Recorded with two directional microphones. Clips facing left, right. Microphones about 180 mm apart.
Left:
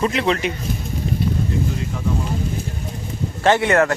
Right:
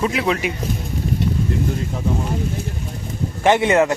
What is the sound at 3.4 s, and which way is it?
Speech, 15° right (ahead or behind).